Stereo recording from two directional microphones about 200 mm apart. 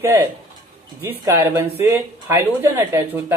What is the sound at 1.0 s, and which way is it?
Speech, 10° right (ahead or behind).